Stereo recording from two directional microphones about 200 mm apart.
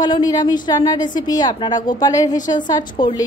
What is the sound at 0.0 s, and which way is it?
A woman's voice, 20° left (ahead or behind).